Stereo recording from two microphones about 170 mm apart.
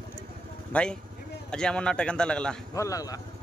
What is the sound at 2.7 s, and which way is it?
Speech, 20° left (ahead or behind).